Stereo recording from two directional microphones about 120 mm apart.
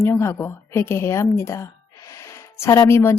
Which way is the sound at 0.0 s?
20° left (ahead or behind).